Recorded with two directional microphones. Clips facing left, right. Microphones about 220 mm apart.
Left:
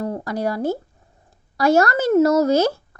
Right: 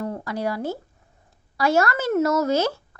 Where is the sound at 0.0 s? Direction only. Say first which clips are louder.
Left 3 dB; 40° left (ahead or behind).